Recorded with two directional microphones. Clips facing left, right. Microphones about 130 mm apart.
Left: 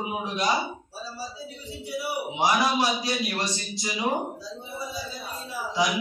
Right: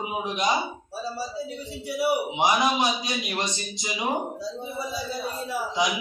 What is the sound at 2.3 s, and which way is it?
A man's voice, 20° right (ahead or behind).